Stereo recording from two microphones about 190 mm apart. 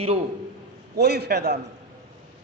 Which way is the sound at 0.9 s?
60° right (ahead or behind).